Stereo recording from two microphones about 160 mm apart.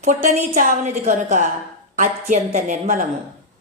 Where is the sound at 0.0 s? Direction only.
55° right (ahead or behind).